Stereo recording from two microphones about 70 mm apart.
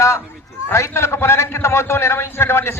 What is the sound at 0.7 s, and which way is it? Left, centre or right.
A man's voice, left.